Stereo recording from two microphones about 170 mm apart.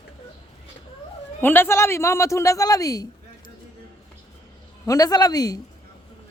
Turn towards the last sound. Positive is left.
turn(degrees=20)  # may be behind; listen again after turning